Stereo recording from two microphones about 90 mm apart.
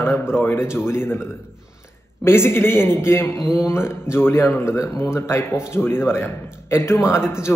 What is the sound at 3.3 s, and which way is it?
Speech, 5° right (ahead or behind).